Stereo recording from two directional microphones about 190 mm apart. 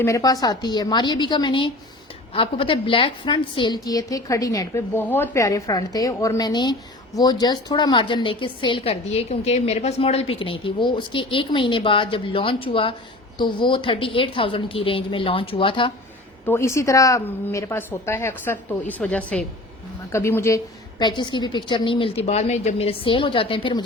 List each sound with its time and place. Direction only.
0.0 s a woman's voice: 15° left (ahead or behind)
16.5 s a woman's voice: 15° left (ahead or behind)